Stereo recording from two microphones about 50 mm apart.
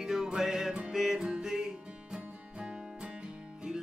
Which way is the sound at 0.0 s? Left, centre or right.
Centre.